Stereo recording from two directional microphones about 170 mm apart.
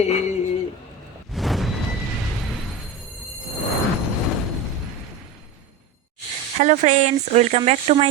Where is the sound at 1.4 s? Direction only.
Centre (ahead or behind).